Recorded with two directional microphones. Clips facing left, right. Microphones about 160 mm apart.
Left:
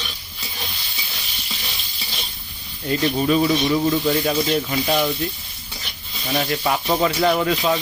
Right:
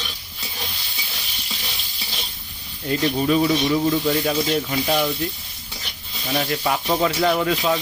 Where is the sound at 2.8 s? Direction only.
Centre (ahead or behind).